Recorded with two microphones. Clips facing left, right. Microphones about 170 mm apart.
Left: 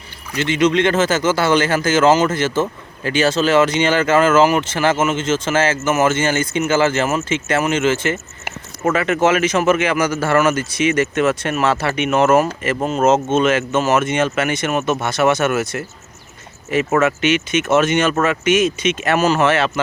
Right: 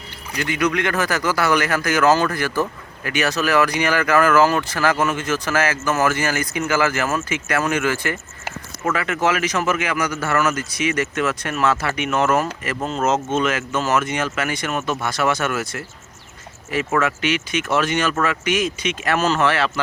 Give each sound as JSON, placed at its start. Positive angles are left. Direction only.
{"t": 0.3, "sound": "speech", "side_deg": 25}